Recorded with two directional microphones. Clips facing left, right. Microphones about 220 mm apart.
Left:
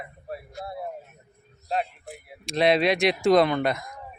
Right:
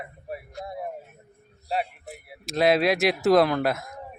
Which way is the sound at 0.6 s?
15° right (ahead or behind).